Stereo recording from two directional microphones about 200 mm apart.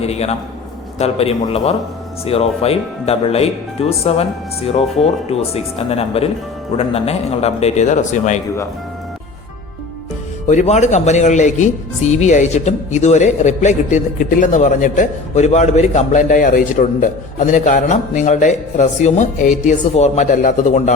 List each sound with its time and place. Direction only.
0.0 s a woman's voice: 30° left (ahead or behind)
10.5 s a woman's voice: 35° left (ahead or behind)